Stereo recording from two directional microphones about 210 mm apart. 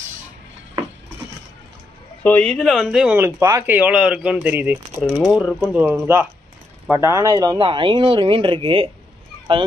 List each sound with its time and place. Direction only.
2.2 s speech: 5° left (ahead or behind); by 8.9 s 25° right (ahead or behind)